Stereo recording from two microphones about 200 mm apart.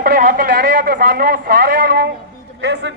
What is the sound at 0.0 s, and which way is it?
Speech, 45° right (ahead or behind).